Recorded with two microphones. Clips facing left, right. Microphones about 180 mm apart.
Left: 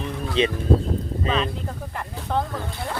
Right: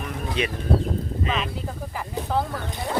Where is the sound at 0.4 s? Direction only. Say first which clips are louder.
Left 6 dB; 25° left (ahead or behind).